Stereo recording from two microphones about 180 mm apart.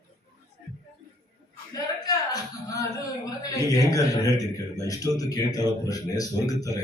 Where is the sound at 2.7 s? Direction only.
20° left (ahead or behind).